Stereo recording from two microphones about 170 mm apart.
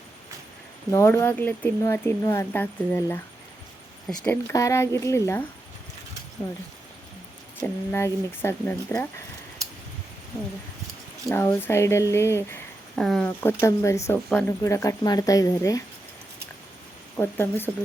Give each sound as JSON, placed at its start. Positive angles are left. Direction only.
{"t": 0.9, "sound": "speech", "side_deg": 15}
{"t": 7.6, "sound": "speech", "side_deg": 10}
{"t": 11.3, "sound": "speech", "side_deg": 15}
{"t": 13.0, "sound": "speech", "side_deg": 5}
{"t": 14.3, "sound": "speech", "side_deg": 5}
{"t": 14.6, "sound": "a woman's voice", "side_deg": 15}
{"t": 17.2, "sound": "speech", "side_deg": 15}